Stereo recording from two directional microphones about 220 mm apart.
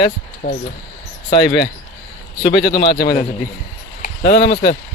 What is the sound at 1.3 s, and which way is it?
Speech, 25° left (ahead or behind).